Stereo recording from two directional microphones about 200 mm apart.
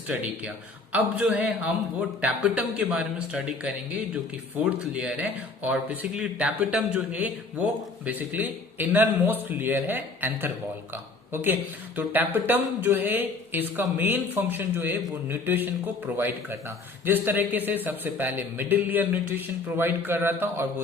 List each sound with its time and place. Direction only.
0.1 s speech: 5° right (ahead or behind)